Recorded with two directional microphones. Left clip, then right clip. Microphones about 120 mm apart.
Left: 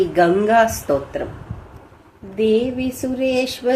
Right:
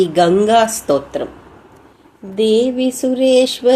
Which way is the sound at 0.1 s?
35° right (ahead or behind).